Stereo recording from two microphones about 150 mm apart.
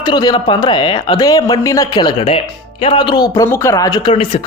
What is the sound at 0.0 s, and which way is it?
Speech, 25° left (ahead or behind).